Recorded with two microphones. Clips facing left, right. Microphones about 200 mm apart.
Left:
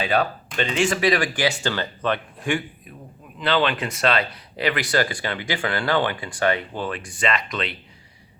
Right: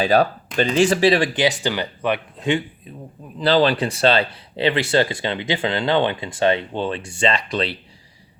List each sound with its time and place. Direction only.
0.0 s speech: 35° right (ahead or behind)
3.3 s speech: 35° right (ahead or behind)